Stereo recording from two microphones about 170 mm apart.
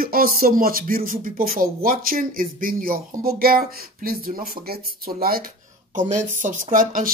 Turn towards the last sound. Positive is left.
turn(degrees=-55)  # may be behind; listen again after turning